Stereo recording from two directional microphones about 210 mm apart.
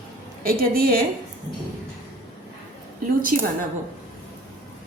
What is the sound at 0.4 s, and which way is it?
Speech, 45° right (ahead or behind).